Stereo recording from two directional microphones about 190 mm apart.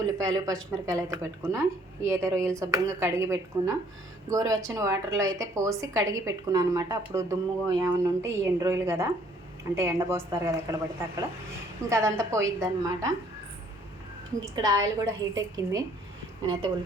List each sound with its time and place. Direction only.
0.2 s a woman's voice: 20° right (ahead or behind)
14.5 s a woman's voice: 20° right (ahead or behind)